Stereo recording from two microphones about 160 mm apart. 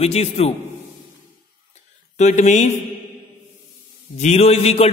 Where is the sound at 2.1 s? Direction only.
45° left (ahead or behind).